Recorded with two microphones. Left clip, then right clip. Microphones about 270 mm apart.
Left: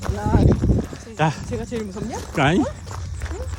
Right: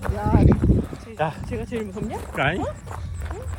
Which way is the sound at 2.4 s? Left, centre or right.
Centre.